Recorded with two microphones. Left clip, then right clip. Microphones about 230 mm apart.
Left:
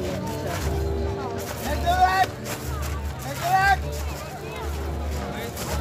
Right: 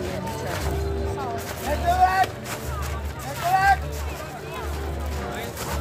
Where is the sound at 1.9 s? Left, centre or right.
Left.